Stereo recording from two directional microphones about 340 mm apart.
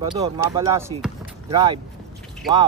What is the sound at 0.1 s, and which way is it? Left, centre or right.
Speech, centre.